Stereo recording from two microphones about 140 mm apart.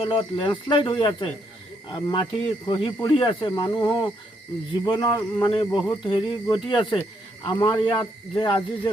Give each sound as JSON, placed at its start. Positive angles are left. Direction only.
{"t": 0.0, "sound": "speech", "side_deg": 35}